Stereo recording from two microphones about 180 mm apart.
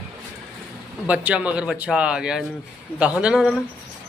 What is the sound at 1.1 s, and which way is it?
A man's voice, 5° right (ahead or behind).